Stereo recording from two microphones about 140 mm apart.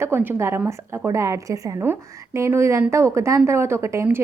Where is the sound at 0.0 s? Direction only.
15° right (ahead or behind).